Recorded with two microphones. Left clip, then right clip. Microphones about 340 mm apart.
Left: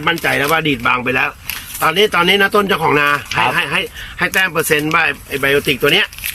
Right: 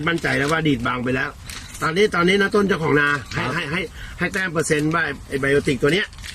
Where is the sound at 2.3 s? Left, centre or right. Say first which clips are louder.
Left 6 dB; left.